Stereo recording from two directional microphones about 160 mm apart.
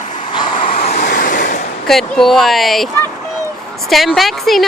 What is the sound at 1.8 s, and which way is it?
A woman's voice, centre (ahead or behind).